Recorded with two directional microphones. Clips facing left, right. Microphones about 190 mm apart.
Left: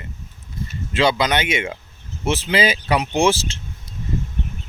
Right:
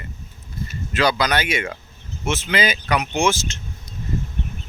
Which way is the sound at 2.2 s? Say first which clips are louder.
Left 3 dB; 35° left (ahead or behind).